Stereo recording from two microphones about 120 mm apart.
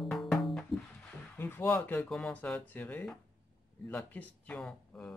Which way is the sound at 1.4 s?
20° left (ahead or behind).